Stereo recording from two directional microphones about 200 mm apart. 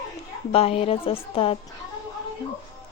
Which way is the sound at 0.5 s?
30° left (ahead or behind).